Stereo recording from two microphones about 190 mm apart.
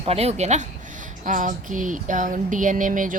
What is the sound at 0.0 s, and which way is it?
Speech, 35° right (ahead or behind).